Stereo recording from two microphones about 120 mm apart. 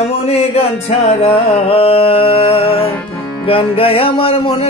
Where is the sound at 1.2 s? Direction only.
50° left (ahead or behind).